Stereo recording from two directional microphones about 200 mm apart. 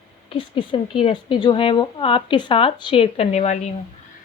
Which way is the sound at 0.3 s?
25° left (ahead or behind).